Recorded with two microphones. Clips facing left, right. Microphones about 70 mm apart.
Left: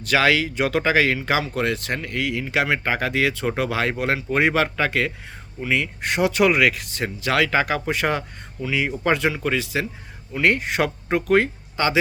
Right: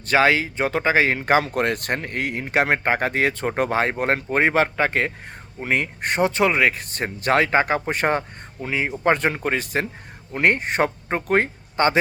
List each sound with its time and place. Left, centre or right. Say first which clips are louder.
0.0 s speech: right 1 dB; right